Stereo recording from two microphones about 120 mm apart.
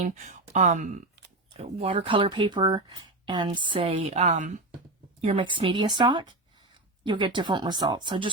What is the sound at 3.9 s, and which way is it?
Speech, 70° right (ahead or behind).